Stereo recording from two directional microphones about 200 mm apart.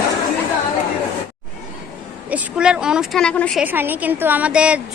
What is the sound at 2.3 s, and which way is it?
A woman's voice, 5° right (ahead or behind).